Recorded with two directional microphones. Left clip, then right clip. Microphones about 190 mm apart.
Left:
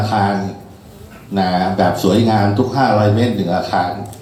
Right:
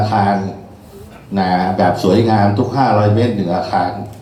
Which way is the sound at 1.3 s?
65° left (ahead or behind).